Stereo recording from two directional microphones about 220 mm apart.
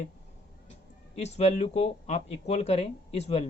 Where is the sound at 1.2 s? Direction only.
30° left (ahead or behind).